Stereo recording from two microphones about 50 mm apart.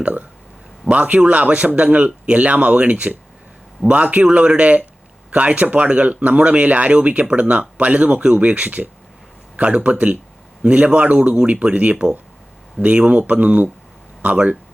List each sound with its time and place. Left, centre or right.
0.0 s speech: right